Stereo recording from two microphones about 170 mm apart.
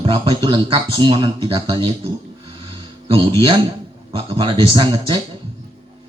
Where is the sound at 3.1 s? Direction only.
30° right (ahead or behind).